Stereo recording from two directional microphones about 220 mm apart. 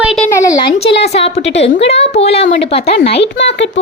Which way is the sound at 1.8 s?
30° left (ahead or behind).